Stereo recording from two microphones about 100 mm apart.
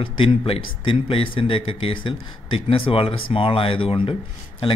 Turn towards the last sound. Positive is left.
turn(degrees=65)  # may be behind; listen again after turning